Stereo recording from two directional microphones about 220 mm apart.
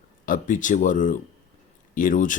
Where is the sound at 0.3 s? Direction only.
35° left (ahead or behind).